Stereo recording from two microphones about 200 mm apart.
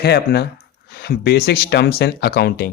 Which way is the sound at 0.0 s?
55° left (ahead or behind).